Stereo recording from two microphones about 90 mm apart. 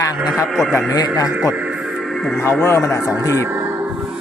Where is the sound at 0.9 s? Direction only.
45° left (ahead or behind).